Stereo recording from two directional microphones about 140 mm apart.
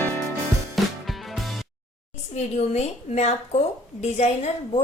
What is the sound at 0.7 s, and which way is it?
Music, centre (ahead or behind).